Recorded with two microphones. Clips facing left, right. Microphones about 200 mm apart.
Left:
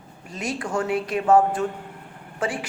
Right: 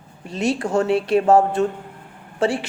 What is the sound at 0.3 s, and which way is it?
Speech, 30° right (ahead or behind).